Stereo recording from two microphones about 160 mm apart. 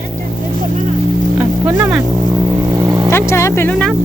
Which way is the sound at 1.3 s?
10° right (ahead or behind).